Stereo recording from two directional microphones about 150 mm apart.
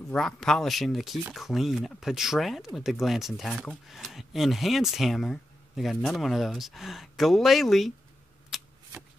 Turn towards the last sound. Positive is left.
turn(degrees=0)  # may be behind; listen again after turning